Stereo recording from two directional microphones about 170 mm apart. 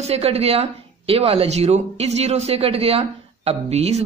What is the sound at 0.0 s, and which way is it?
Speech, 35° right (ahead or behind).